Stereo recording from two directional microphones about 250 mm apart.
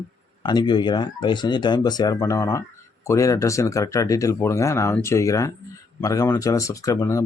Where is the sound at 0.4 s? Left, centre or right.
Centre.